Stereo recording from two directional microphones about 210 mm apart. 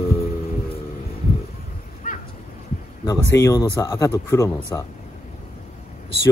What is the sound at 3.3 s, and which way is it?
Speech, 15° left (ahead or behind).